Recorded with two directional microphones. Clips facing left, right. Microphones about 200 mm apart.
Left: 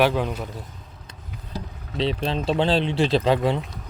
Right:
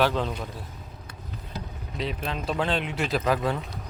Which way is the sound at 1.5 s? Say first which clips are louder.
Left 6 dB; 30° left (ahead or behind).